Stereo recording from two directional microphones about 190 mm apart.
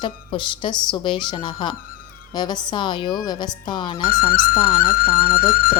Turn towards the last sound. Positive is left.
turn(degrees=50)  # may be behind; listen again after turning